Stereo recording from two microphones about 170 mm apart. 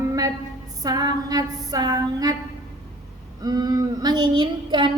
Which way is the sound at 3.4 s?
25° right (ahead or behind).